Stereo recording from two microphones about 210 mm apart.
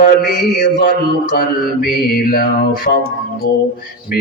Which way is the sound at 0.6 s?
40° left (ahead or behind).